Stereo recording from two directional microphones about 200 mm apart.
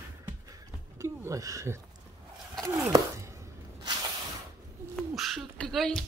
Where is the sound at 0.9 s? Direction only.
15° right (ahead or behind).